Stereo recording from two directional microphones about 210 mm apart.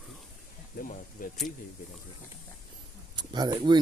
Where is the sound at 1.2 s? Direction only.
40° left (ahead or behind).